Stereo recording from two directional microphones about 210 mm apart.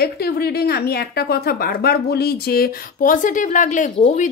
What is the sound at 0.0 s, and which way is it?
A woman's voice, 50° left (ahead or behind).